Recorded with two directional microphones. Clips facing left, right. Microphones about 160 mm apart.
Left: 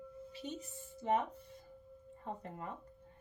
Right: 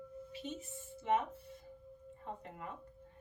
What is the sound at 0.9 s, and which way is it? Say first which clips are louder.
Music: even; 40° left (ahead or behind).